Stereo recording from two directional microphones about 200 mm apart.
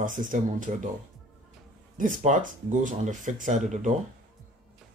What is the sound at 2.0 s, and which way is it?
Speech, 40° right (ahead or behind).